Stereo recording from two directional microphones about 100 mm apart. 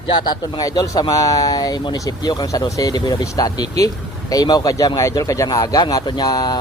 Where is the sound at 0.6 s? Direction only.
40° left (ahead or behind).